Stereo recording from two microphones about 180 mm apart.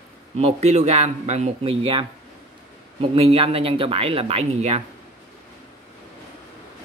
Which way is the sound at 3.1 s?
35° right (ahead or behind).